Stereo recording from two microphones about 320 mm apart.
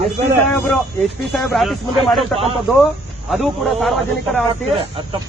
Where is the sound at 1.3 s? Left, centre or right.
Centre.